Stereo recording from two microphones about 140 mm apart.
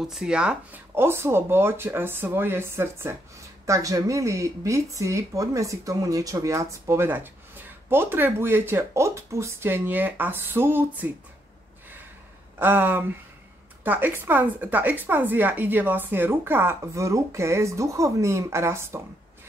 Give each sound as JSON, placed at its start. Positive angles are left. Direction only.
{"t": 0.0, "sound": "a woman's voice", "side_deg": -5}
{"t": 12.5, "sound": "a woman's voice", "side_deg": -15}